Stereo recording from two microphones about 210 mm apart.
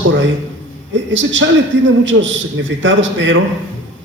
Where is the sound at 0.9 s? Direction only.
65° right (ahead or behind).